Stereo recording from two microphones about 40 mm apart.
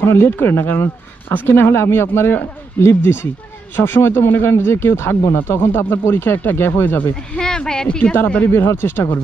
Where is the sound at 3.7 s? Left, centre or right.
Left.